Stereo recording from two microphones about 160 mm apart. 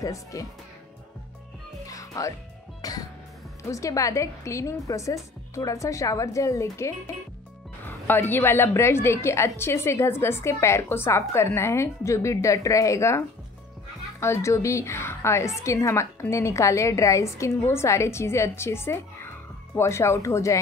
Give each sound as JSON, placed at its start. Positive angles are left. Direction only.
{"t": 0.0, "sound": "a woman's voice", "side_deg": 20}
{"t": 1.9, "sound": "music", "side_deg": 20}
{"t": 3.6, "sound": "a woman's voice", "side_deg": 20}
{"t": 14.2, "sound": "a woman's voice", "side_deg": 15}